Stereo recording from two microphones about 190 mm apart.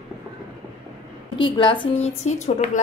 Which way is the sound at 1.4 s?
25° left (ahead or behind).